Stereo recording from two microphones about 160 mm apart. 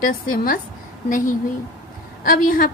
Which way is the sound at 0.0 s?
60° left (ahead or behind).